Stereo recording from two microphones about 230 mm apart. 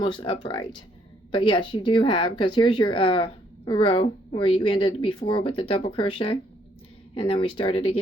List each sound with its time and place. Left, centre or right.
0.0 s a woman's voice: left